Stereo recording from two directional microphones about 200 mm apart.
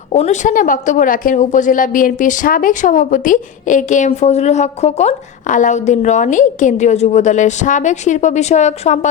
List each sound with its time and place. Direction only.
0.1 s a woman's voice: 35° left (ahead or behind)